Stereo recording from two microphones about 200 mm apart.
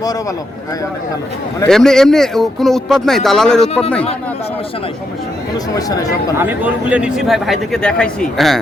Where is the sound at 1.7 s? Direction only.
Centre (ahead or behind).